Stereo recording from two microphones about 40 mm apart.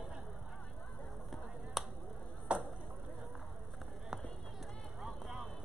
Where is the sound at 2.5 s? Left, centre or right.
Right.